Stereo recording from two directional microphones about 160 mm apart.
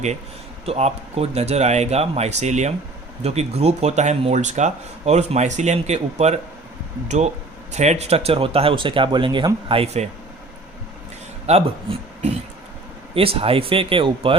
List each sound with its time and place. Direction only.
0.6 s speech: 40° right (ahead or behind)
7.7 s speech: 45° right (ahead or behind)
11.4 s speech: 40° right (ahead or behind)